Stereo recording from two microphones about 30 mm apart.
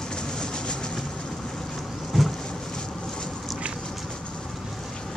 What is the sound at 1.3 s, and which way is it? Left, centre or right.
Vehicle, centre.